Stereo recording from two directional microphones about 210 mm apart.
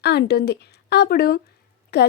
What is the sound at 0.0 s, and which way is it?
Speech, 50° left (ahead or behind).